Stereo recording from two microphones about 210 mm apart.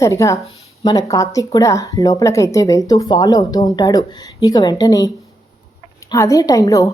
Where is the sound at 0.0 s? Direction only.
15° left (ahead or behind).